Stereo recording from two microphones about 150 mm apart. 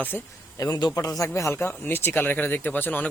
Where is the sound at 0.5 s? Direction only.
25° left (ahead or behind).